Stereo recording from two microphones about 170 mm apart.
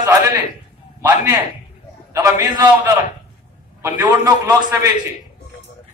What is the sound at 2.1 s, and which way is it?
Speech, 20° right (ahead or behind).